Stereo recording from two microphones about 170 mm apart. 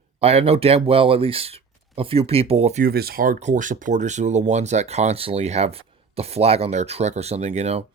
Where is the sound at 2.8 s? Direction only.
65° right (ahead or behind).